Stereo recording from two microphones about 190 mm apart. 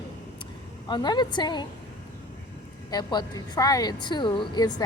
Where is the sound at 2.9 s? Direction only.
20° left (ahead or behind).